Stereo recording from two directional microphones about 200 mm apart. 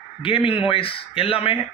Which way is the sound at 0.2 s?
25° left (ahead or behind).